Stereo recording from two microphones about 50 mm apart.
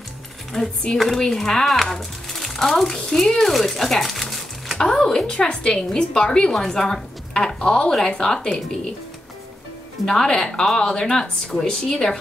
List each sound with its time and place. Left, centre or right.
0.5 s a woman's voice: centre
0.9 s a woman's voice: centre
10.0 s a woman's voice: centre